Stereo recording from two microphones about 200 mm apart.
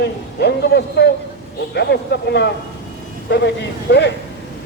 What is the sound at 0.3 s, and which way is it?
Speech, 55° left (ahead or behind).